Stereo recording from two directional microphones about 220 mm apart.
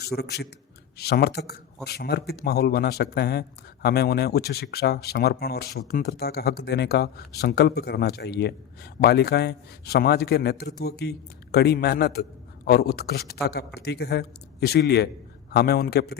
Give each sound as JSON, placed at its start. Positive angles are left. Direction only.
{"t": 0.0, "sound": "a man's voice", "side_deg": 45}